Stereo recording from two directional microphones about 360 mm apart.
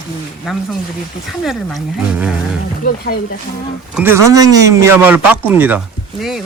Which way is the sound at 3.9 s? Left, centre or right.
Centre.